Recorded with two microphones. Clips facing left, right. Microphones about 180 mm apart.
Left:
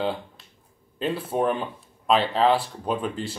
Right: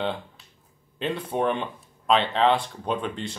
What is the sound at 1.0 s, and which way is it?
Speech, 5° left (ahead or behind).